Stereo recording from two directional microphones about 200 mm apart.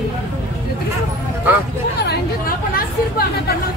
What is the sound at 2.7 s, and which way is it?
Speech, 50° left (ahead or behind).